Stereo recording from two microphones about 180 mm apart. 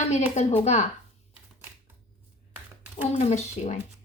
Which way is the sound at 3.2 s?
40° left (ahead or behind).